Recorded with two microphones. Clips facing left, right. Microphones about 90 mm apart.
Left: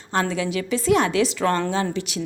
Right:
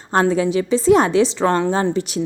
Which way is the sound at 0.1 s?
35° right (ahead or behind).